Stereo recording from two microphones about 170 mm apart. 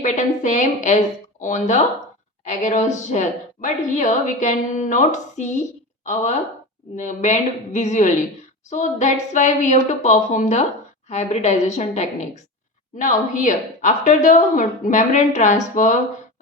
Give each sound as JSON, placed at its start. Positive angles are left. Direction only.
{"t": 0.0, "sound": "a woman's voice", "side_deg": 45}
{"t": 6.9, "sound": "a woman's voice", "side_deg": 45}